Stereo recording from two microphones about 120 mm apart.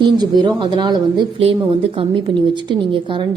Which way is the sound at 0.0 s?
35° right (ahead or behind).